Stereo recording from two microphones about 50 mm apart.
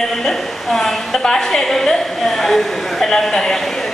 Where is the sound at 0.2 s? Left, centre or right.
Centre.